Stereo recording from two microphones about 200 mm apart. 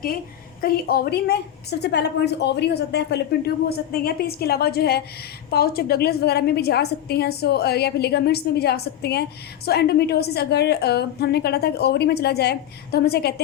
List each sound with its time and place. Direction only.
0.6 s a woman's voice: 50° left (ahead or behind)